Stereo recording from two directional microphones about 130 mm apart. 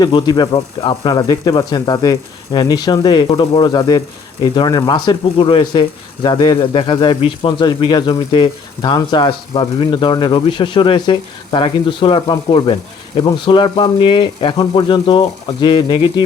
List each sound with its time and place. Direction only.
0.0 s speech: 35° left (ahead or behind)